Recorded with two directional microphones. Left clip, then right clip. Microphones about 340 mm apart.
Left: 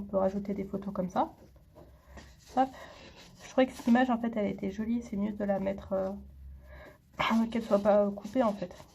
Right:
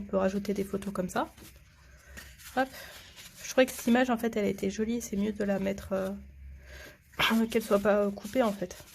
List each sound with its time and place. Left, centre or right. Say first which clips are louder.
0.1 s speech: right 1 dB; right
3.8 s speech: right 1 dB; right
7.3 s speech: right 1 dB; right